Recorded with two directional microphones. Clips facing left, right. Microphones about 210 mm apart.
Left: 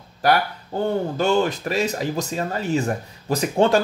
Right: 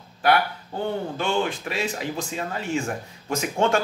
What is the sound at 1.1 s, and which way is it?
Speech, 40° left (ahead or behind).